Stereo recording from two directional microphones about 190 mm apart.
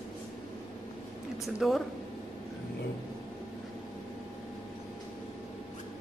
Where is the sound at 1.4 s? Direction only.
Centre (ahead or behind).